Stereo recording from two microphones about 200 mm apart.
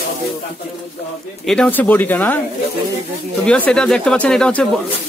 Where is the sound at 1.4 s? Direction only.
5° left (ahead or behind).